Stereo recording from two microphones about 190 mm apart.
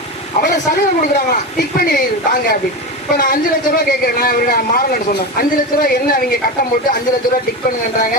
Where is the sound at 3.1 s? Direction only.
50° left (ahead or behind).